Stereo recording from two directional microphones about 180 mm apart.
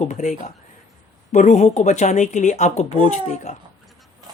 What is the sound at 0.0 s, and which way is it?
Speech, 40° left (ahead or behind).